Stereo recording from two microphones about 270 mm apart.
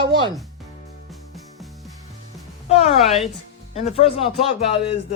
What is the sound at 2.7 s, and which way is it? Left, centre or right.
A woman's voice, left.